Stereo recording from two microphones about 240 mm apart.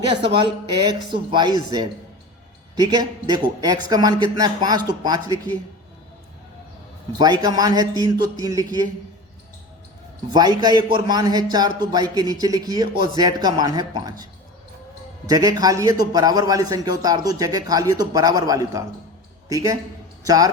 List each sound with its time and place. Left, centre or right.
0.8 s a man's voice: centre
7.2 s a man's voice: centre
10.3 s a man's voice: centre
15.3 s a man's voice: centre